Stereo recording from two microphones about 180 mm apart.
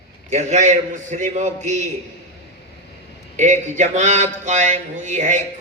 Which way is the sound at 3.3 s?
40° right (ahead or behind).